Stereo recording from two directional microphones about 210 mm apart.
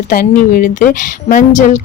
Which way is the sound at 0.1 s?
40° left (ahead or behind).